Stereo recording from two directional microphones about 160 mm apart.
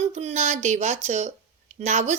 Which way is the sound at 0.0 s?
40° right (ahead or behind).